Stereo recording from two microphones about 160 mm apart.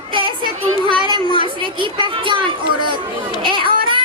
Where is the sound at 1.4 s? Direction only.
30° right (ahead or behind).